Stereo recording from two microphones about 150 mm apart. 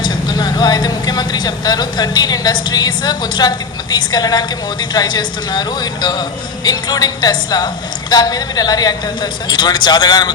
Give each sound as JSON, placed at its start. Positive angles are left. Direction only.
{"t": 0.0, "sound": "a woman's voice", "side_deg": 30}